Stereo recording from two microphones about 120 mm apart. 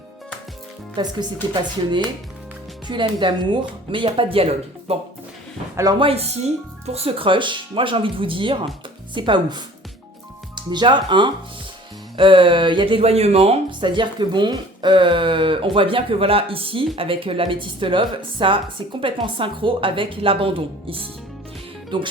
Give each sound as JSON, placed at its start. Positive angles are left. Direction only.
{"t": 0.9, "sound": "speech", "side_deg": -35}
{"t": 2.8, "sound": "speech", "side_deg": -40}
{"t": 5.7, "sound": "speech", "side_deg": -30}
{"t": 6.0, "sound": "speech", "side_deg": -55}
{"t": 13.7, "sound": "speech", "side_deg": -40}